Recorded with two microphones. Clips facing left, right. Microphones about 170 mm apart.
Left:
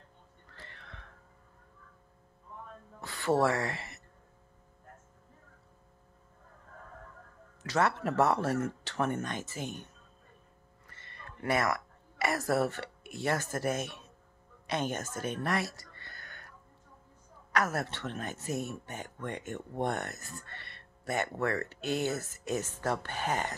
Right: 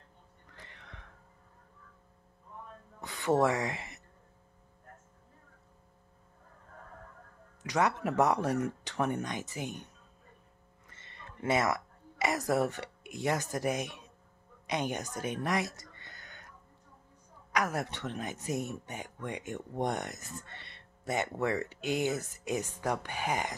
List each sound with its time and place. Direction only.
0.5 s music: 15° right (ahead or behind)
3.0 s a sound: 20° right (ahead or behind)
7.6 s speech: 15° right (ahead or behind)
10.9 s speech: 20° right (ahead or behind)